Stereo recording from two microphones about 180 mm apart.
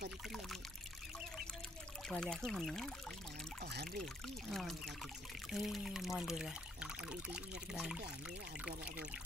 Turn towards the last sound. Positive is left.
turn(degrees=0)  # may be behind; listen again after turning